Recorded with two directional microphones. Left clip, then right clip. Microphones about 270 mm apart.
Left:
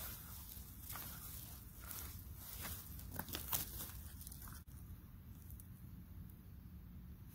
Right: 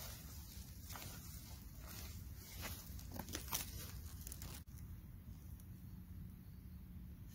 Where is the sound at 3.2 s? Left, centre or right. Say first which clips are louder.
Even; centre.